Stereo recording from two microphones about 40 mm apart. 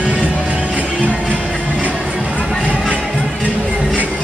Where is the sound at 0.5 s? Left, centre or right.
Right.